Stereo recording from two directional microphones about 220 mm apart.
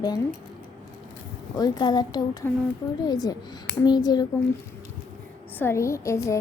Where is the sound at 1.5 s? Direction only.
20° left (ahead or behind).